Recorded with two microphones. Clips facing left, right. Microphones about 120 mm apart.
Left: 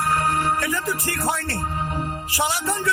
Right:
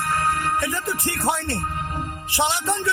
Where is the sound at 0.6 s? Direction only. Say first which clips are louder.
Left 1 dB; 25° right (ahead or behind).